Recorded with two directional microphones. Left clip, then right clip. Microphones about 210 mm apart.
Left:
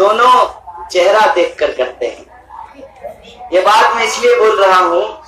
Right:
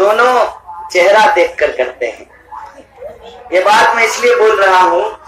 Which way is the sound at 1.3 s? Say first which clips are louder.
Right 2 dB; 10° left (ahead or behind).